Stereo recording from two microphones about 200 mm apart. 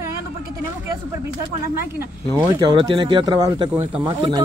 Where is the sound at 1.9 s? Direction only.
15° right (ahead or behind).